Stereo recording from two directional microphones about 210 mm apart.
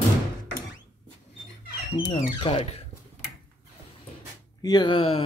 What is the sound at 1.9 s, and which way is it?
Speech, 25° left (ahead or behind).